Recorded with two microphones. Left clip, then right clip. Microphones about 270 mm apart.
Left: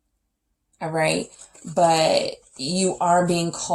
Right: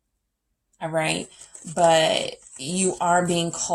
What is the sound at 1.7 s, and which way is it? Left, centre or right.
Speech, right.